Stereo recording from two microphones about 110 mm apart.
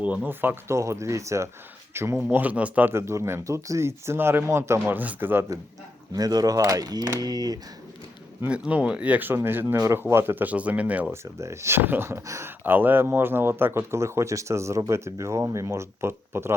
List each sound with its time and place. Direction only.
0.0 s speech: 15° right (ahead or behind)
6.1 s speech: 35° right (ahead or behind)
8.4 s speech: 10° right (ahead or behind)
11.1 s speech: 25° right (ahead or behind)